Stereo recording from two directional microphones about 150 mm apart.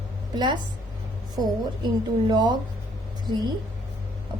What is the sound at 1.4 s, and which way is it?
A woman's voice, 30° right (ahead or behind).